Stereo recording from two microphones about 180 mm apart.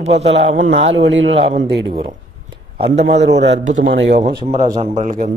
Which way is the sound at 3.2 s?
80° right.